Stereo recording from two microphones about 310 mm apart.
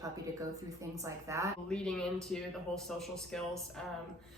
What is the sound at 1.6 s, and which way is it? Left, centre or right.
A woman's voice, centre.